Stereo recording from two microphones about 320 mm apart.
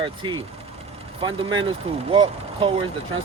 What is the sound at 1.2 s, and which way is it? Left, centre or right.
Speech, centre.